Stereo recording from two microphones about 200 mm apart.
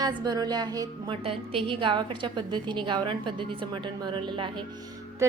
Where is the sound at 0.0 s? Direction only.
20° right (ahead or behind).